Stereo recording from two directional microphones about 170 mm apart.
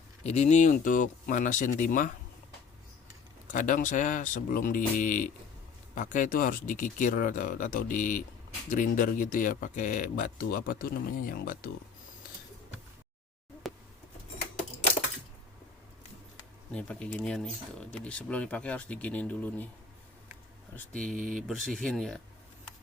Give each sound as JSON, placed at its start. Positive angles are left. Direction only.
{"t": 0.2, "sound": "speech", "side_deg": 40}
{"t": 3.5, "sound": "speech", "side_deg": 50}
{"t": 13.6, "sound": "a sound", "side_deg": 0}
{"t": 16.7, "sound": "speech", "side_deg": 5}
{"t": 20.7, "sound": "speech", "side_deg": 5}